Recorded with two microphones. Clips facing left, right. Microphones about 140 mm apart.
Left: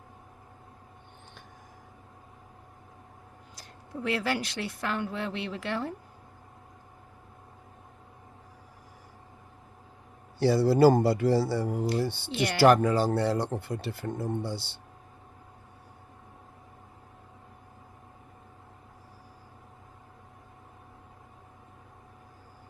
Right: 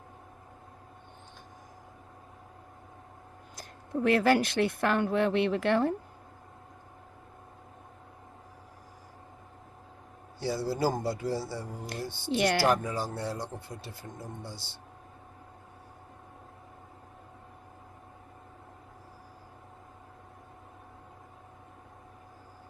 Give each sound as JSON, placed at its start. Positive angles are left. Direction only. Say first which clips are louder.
{"t": 3.5, "sound": "speech", "louder": "right 7 dB", "side_deg": -50}
{"t": 10.4, "sound": "speech", "louder": "left 9 dB", "side_deg": 70}